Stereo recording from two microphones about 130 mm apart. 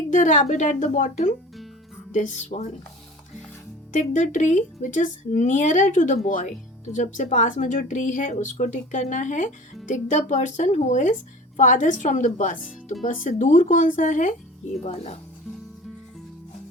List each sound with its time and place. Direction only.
0.1 s speech: 75° left (ahead or behind)
3.9 s speech: 75° left (ahead or behind)
13.2 s speech: 85° left
14.8 s speech: 55° left (ahead or behind)